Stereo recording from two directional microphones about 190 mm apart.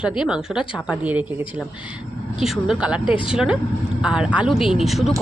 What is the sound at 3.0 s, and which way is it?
Speech, 25° left (ahead or behind).